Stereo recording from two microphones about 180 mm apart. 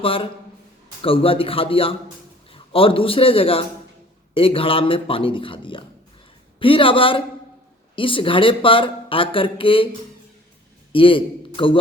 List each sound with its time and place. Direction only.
0.0 s a man's voice: 30° left (ahead or behind)
10.9 s a man's voice: 30° left (ahead or behind)